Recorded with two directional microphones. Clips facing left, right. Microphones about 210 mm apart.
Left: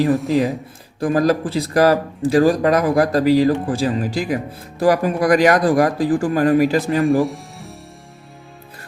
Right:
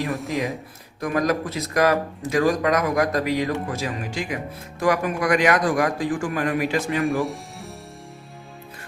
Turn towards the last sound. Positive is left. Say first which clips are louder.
# left 4 dB
turn(degrees=0)  # may be behind; listen again after turning